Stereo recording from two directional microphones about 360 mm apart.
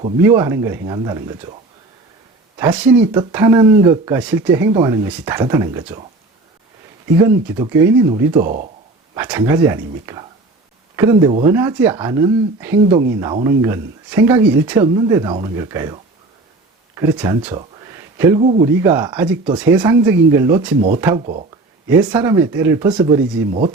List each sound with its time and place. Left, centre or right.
0.2 s speech: centre
2.6 s speech: centre
7.3 s speech: centre
8.4 s speech: right
9.1 s speech: centre
17.6 s a sound: centre
18.7 s speech: centre
21.8 s speech: centre